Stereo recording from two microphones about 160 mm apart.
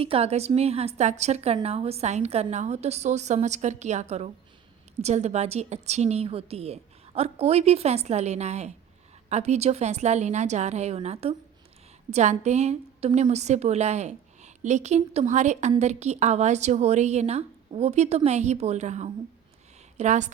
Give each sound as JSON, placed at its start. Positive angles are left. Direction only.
{"t": 0.0, "sound": "a woman's voice", "side_deg": -35}